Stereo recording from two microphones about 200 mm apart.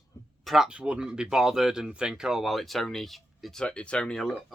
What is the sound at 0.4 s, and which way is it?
Speech, centre (ahead or behind).